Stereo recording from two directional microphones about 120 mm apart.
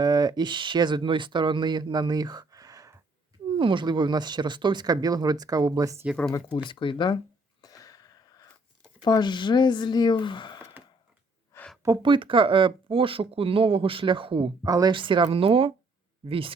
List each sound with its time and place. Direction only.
0.0 s speech: 35° right (ahead or behind)
3.6 s speech: 45° right (ahead or behind); by 6.1 s 30° right (ahead or behind)
6.3 s speech: 40° left (ahead or behind)
7.6 s wheeze: 30° left (ahead or behind)
9.0 s speech: 35° left (ahead or behind)
11.5 s a sound: 20° left (ahead or behind)
12.0 s speech: 45° right (ahead or behind)
14.6 s speech: 35° right (ahead or behind); by 16.5 s 50° right (ahead or behind)